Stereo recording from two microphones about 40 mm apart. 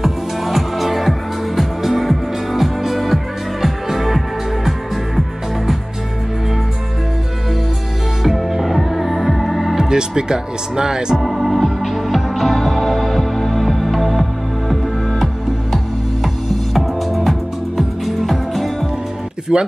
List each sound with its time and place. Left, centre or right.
0.0 s music: centre
8.2 s music: centre
9.8 s speech: centre
11.1 s music: centre
16.7 s music: centre
19.5 s speech: centre